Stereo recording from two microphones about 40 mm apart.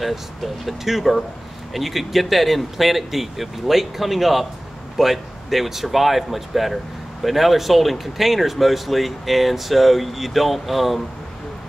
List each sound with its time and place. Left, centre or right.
0.0 s speech: centre